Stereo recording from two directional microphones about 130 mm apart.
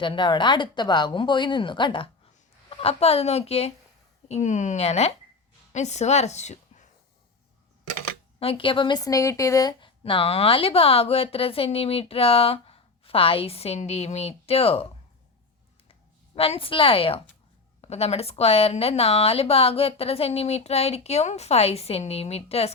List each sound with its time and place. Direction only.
0.0 s speech: 35° left (ahead or behind)
2.6 s a woman's voice: 50° left (ahead or behind)
4.3 s a woman's voice: 65° left (ahead or behind)
8.4 s speech: 45° left (ahead or behind)
10.0 s speech: 45° left (ahead or behind)
16.3 s speech: 45° left (ahead or behind)